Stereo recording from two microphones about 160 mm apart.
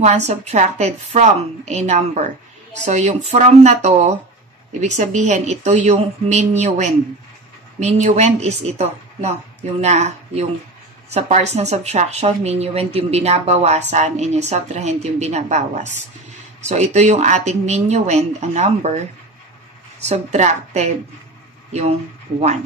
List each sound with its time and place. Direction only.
0.0 s a woman's voice: 45° right (ahead or behind)
20.0 s a woman's voice: 45° right (ahead or behind)